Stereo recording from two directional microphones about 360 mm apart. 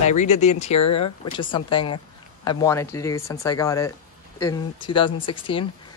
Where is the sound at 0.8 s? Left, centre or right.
Left.